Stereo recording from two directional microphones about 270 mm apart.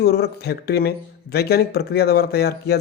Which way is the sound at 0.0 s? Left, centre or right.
Left.